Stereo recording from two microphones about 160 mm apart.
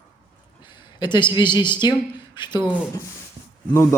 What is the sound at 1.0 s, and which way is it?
Speech, 30° left (ahead or behind).